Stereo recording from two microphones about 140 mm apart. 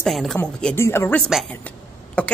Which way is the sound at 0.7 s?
15° left (ahead or behind).